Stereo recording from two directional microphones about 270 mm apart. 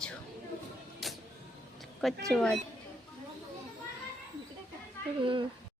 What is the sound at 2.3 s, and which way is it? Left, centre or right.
Speech, centre.